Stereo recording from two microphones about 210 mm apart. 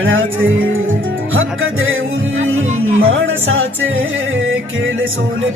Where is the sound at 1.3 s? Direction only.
70° right (ahead or behind).